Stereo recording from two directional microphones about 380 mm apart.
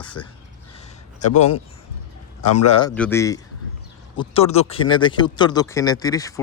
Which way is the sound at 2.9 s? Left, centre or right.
Centre.